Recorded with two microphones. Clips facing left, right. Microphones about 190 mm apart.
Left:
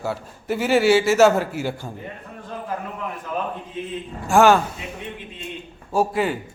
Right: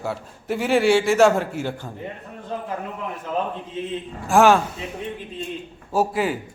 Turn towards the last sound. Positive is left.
turn(degrees=0)  # may be behind; listen again after turning